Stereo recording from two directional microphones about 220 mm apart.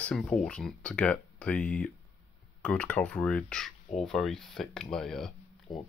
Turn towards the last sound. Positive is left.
turn(degrees=20)  # may be behind; listen again after turning